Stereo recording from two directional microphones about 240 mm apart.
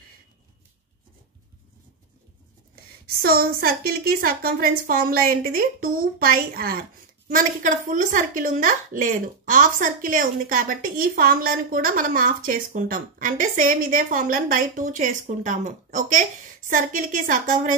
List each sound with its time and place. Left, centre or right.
2.7 s a woman's voice: right